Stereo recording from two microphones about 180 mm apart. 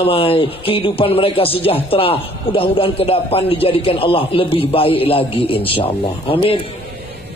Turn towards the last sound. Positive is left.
turn(degrees=30)  # may be behind; listen again after turning